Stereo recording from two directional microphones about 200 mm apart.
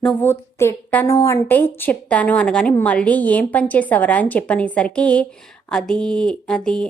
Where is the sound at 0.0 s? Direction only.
5° left (ahead or behind).